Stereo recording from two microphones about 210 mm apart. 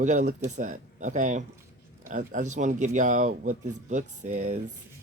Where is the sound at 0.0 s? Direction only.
35° right (ahead or behind).